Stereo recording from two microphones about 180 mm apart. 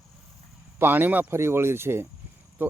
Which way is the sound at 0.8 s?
10° right (ahead or behind).